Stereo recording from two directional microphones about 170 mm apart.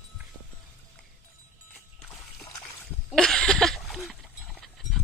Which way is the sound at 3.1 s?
5° left (ahead or behind).